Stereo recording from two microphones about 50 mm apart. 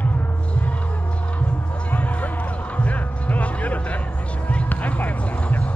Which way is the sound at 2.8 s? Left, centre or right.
Left.